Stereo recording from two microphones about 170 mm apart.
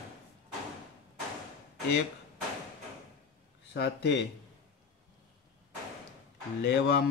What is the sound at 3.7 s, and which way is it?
Speech, 90° left.